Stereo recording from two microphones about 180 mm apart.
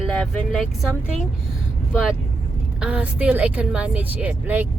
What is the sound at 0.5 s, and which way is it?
Speech, centre (ahead or behind).